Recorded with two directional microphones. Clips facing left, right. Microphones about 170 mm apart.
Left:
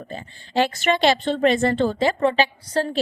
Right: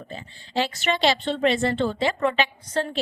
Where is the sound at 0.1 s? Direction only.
50° left (ahead or behind).